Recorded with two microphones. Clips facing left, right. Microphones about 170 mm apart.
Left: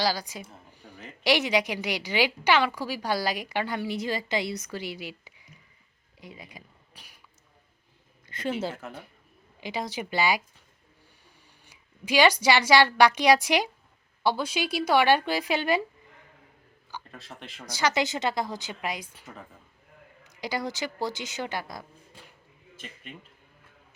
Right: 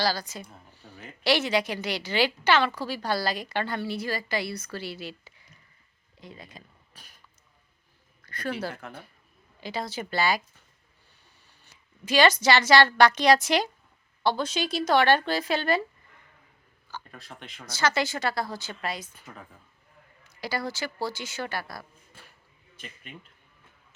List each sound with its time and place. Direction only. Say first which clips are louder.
0.0 s a woman's voice: even; 15° left (ahead or behind)
0.7 s a sound: left 1 dB; 15° left (ahead or behind)
1.2 s a woman's voice: even; 15° left (ahead or behind)
6.1 s a sound: even; 10° left (ahead or behind)
8.2 s a sound: left 2 dB; 20° left (ahead or behind)
8.8 s speech: left 2 dB; 5° left (ahead or behind)
9.6 s a woman's voice: left 1 dB; 15° left (ahead or behind)
11.6 s a woman's voice: left 2 dB; 10° left (ahead or behind)
17.1 s speech: left 1 dB; centre (ahead or behind)
17.7 s a woman's voice: even; 15° left (ahead or behind)
20.2 s a woman's voice: even; 15° left (ahead or behind)